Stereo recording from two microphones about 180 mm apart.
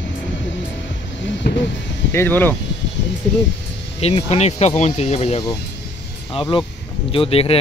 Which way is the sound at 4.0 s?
35° left (ahead or behind).